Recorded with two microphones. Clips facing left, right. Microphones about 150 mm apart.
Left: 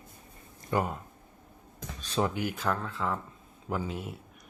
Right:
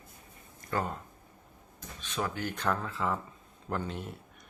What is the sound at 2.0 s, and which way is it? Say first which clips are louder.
Drawer open or close: left 5 dB; 30° left (ahead or behind).